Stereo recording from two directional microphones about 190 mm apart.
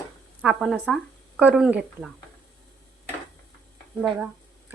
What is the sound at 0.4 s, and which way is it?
Speech, centre (ahead or behind).